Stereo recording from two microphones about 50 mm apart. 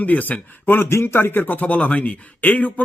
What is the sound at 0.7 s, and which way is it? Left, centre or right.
A man's voice, left.